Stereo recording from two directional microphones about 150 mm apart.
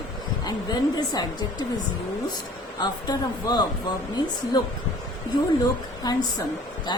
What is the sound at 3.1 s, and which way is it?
Speech, 25° left (ahead or behind).